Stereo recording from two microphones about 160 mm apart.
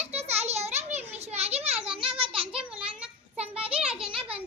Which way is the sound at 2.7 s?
5° right (ahead or behind).